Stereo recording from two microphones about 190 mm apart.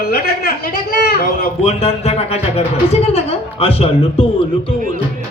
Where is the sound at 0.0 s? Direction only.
50° left (ahead or behind).